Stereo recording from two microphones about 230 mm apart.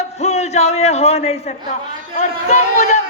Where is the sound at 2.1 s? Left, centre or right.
Left.